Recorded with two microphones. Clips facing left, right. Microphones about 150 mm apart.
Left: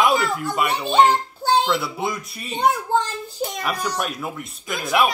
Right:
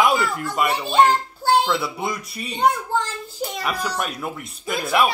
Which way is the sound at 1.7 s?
Centre (ahead or behind).